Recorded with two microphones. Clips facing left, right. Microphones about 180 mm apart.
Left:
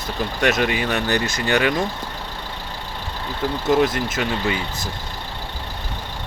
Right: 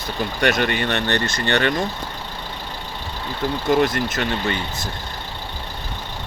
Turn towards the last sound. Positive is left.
turn(degrees=5)  # may be behind; listen again after turning